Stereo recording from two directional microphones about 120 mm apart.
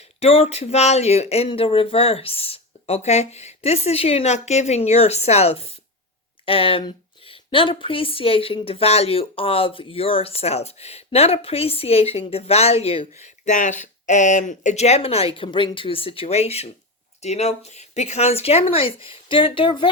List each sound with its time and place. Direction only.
0.2 s speech: 55° left (ahead or behind)
1.5 s speech: 50° left (ahead or behind)